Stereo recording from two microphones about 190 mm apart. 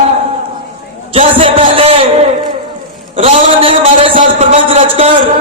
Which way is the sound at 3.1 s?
30° right (ahead or behind).